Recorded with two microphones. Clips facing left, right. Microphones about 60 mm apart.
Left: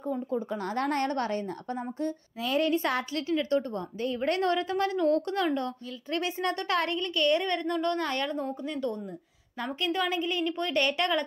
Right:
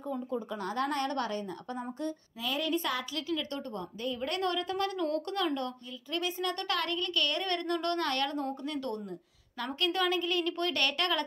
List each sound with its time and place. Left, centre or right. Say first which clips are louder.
0.1 s a woman's voice: left 4 dB; left
7.4 s a woman's voice: left 3 dB; centre
9.6 s a woman's voice: left 1 dB; centre